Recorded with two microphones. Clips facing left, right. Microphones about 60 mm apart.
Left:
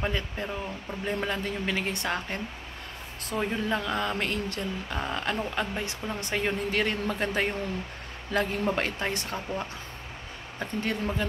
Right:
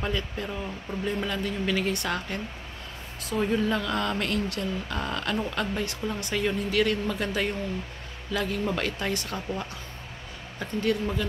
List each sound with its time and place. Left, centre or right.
0.0 s speech: left
10.6 s speech: left